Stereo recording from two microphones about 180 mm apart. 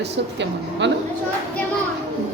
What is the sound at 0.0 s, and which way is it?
Speech, 80° right.